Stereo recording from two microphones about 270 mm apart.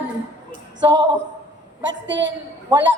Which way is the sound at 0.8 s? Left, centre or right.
Centre.